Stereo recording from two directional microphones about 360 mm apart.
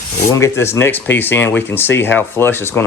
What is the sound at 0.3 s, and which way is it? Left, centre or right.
Speech, centre.